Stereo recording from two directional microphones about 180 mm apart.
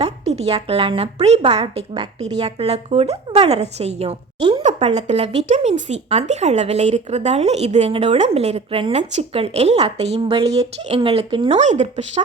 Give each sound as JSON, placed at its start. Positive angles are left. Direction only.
{"t": 0.0, "sound": "speech", "side_deg": -35}